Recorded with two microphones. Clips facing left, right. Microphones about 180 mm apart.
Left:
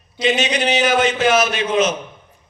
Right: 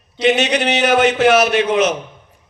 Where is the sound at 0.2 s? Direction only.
65° right (ahead or behind).